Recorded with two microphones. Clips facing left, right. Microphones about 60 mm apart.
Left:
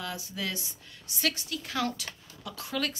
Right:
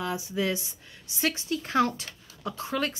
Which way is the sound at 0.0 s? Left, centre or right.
Right.